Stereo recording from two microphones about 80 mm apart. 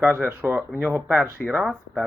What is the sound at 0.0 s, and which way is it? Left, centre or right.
Speech, right.